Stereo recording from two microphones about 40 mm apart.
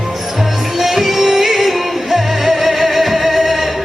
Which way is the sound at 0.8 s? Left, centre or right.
Centre.